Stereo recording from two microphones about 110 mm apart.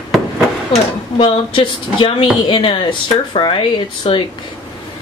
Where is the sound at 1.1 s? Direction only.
50° left (ahead or behind).